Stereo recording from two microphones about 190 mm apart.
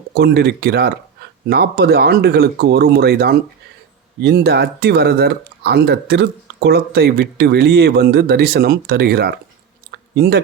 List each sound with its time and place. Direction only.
0.1 s speech: 60° right (ahead or behind)